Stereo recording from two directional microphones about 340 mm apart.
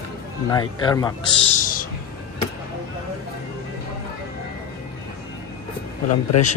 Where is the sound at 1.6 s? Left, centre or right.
Left.